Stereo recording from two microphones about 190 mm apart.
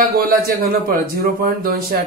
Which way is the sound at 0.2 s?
55° right (ahead or behind).